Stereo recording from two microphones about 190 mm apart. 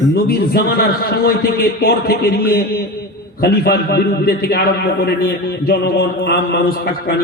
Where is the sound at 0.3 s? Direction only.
55° left (ahead or behind).